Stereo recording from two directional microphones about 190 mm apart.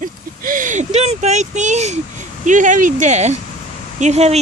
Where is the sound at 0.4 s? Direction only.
45° right (ahead or behind).